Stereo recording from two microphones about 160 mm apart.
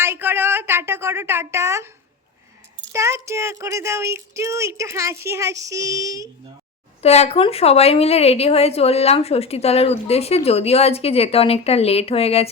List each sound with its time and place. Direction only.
0.0 s a woman's voice: 15° right (ahead or behind)
2.9 s speech: 20° right (ahead or behind)
7.0 s a woman's voice: 40° left (ahead or behind)